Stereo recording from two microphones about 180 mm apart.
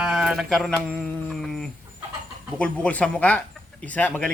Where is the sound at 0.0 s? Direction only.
5° right (ahead or behind).